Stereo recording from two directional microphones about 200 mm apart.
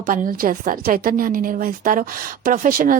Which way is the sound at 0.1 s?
45° right (ahead or behind).